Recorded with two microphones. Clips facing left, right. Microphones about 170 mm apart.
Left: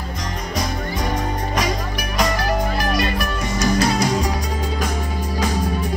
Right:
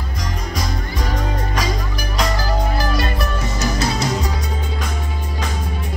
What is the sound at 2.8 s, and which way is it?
Music, 30° right (ahead or behind).